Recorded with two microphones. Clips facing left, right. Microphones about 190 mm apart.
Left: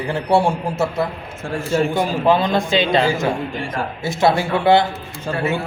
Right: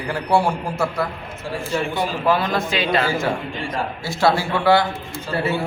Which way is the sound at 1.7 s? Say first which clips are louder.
Left 5 dB; 45° left (ahead or behind).